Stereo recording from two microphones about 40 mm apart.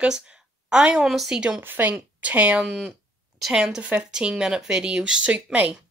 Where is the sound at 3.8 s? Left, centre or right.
Right.